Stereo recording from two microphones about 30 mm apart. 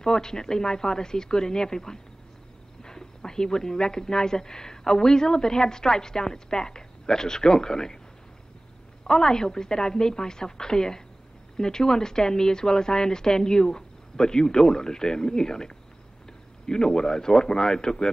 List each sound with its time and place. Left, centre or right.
0.0 s speech: left
9.0 s speech: left